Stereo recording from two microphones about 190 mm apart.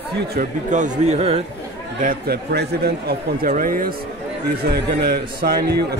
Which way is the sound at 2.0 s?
50° right (ahead or behind).